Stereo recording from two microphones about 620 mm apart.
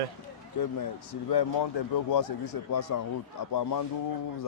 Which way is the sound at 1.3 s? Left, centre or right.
Left.